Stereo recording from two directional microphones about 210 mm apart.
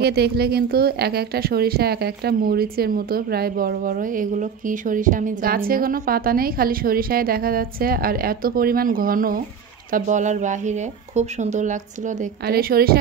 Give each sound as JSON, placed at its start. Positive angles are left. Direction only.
{"t": 0.0, "sound": "a woman's voice", "side_deg": -50}
{"t": 12.4, "sound": "a woman's voice", "side_deg": -45}